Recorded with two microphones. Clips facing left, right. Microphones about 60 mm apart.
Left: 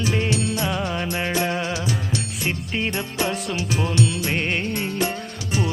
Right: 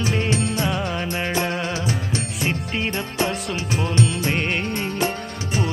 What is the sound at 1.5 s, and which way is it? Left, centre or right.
Music, centre.